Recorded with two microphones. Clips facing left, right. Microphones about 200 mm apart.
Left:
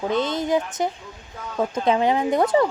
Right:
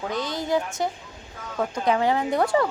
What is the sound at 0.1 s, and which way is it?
Speech, 25° left (ahead or behind).